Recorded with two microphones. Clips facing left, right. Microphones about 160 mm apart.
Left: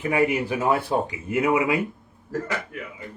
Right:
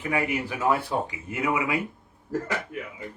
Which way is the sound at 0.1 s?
20° left (ahead or behind).